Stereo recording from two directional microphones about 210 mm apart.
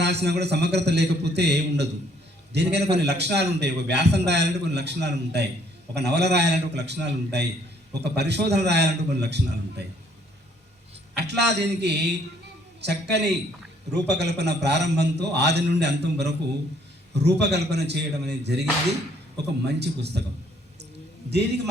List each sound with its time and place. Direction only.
0.0 s a man's voice: 55° right (ahead or behind)
11.1 s a man's voice: 50° right (ahead or behind)
21.2 s a man's voice: 55° right (ahead or behind)